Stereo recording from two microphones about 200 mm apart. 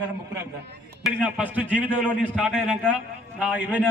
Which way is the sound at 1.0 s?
5° right (ahead or behind).